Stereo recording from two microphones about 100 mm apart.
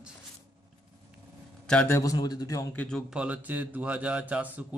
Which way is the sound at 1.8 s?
30° left (ahead or behind).